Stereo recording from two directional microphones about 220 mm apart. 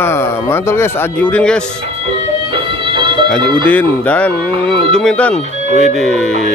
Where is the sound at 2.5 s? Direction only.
20° right (ahead or behind).